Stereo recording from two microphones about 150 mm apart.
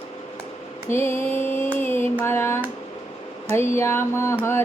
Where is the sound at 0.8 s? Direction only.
15° left (ahead or behind).